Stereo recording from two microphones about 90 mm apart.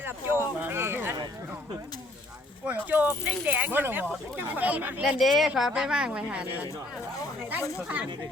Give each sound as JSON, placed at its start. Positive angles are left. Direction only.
{"t": 0.0, "sound": "a sound", "side_deg": -25}
{"t": 2.6, "sound": "vehicle", "side_deg": -20}
{"t": 3.2, "sound": "a woman's voice", "side_deg": -20}
{"t": 5.2, "sound": "a woman's voice", "side_deg": 0}